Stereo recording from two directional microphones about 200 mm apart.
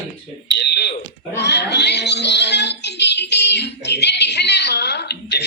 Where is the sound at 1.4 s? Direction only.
60° left (ahead or behind).